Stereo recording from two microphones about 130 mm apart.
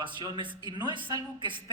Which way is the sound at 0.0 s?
35° right (ahead or behind).